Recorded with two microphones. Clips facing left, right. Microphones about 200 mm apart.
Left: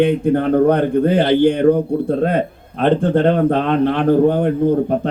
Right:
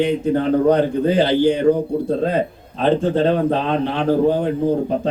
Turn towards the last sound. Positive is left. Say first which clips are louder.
# left 3 dB
turn(degrees=55)  # may be behind; listen again after turning